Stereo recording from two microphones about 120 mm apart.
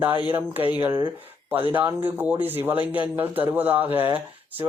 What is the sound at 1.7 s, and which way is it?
Speech, 15° right (ahead or behind).